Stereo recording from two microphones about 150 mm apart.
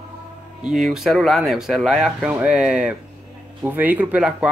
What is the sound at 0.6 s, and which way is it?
Speech, centre (ahead or behind).